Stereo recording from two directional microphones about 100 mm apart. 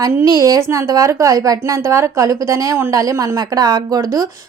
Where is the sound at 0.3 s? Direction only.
40° right (ahead or behind).